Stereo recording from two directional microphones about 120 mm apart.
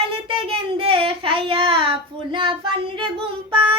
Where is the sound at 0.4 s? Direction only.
50° right (ahead or behind).